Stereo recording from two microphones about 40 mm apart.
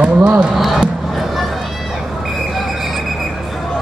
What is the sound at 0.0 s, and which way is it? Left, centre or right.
Speech, right.